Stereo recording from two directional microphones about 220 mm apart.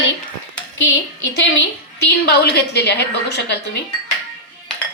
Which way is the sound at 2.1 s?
45° left (ahead or behind).